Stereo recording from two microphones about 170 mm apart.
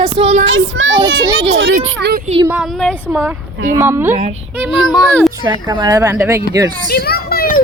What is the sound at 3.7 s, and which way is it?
Speech, 15° right (ahead or behind).